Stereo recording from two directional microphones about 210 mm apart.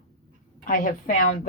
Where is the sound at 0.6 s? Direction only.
40° left (ahead or behind).